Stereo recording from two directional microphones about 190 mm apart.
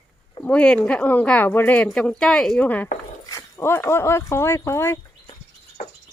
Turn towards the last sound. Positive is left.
turn(degrees=15)  # may be behind; listen again after turning